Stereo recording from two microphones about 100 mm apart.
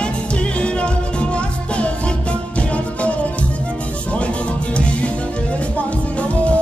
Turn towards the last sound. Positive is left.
turn(degrees=15)  # may be behind; listen again after turning